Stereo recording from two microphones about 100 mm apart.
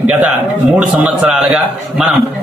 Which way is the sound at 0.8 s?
10° right (ahead or behind).